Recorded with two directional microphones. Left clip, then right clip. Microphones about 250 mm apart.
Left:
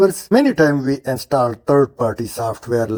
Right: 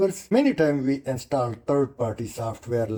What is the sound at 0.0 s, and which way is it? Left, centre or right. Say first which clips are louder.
Speech: left 8 dB; left.